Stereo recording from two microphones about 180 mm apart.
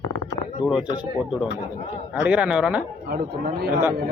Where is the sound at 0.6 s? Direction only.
5° right (ahead or behind).